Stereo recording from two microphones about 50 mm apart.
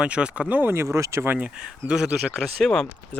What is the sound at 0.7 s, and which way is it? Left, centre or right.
Speech, right.